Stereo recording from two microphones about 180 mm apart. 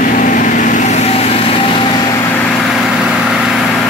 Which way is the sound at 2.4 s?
5° left (ahead or behind).